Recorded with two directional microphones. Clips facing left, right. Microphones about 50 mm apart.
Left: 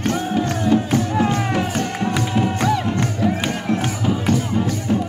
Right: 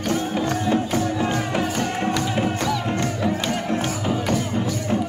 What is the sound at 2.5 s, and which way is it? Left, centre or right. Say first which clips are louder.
Music: left 4 dB; left.